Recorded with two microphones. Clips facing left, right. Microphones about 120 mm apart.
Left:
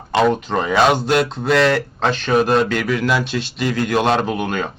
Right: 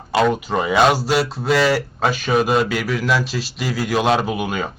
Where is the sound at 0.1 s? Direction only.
5° right (ahead or behind).